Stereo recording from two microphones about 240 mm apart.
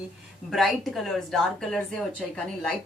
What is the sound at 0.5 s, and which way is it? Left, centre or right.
A woman's voice, centre.